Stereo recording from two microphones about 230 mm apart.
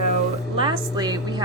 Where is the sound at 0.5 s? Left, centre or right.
Right.